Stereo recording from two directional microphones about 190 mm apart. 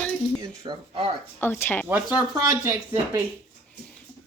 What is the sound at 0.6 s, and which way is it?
Speech, 25° right (ahead or behind).